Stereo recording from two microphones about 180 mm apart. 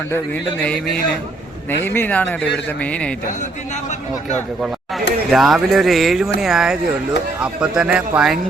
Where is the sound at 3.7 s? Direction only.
40° left (ahead or behind).